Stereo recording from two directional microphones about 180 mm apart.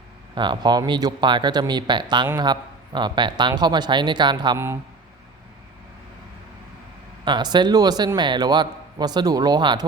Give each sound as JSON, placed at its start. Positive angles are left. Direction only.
{"t": 0.3, "sound": "a man's voice", "side_deg": -25}
{"t": 7.3, "sound": "a man's voice", "side_deg": -25}